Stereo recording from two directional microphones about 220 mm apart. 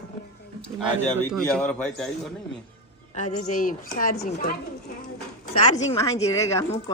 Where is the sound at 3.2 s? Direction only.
30° left (ahead or behind).